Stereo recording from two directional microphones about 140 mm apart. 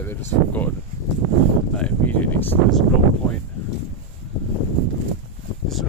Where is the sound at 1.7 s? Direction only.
10° left (ahead or behind).